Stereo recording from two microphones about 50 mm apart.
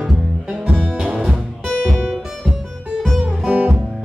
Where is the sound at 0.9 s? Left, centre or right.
Centre.